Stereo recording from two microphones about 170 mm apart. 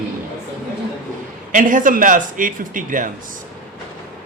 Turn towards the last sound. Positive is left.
turn(degrees=-50)  # may be behind; listen again after turning